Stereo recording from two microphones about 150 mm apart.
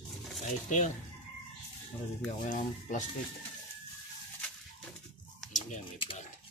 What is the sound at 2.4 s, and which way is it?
Speech, 55° left (ahead or behind).